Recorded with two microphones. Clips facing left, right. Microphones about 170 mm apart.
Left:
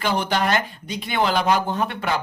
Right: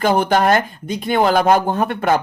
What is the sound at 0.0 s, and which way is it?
Speech, 50° right (ahead or behind).